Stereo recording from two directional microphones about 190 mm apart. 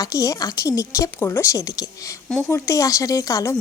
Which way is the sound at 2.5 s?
15° left (ahead or behind).